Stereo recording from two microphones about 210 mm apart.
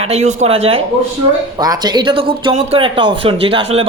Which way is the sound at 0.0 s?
30° right (ahead or behind).